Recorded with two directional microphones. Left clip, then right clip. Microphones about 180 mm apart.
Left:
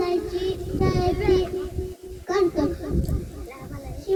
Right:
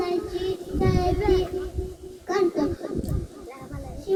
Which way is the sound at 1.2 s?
25° right (ahead or behind).